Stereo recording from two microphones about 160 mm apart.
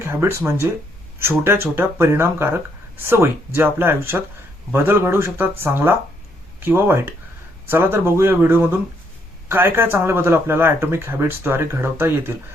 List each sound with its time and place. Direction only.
0.0 s speech: 15° right (ahead or behind)